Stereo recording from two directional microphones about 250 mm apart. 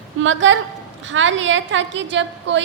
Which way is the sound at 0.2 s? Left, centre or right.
Right.